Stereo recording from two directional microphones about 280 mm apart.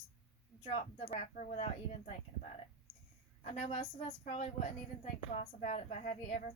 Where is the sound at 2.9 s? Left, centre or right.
Centre.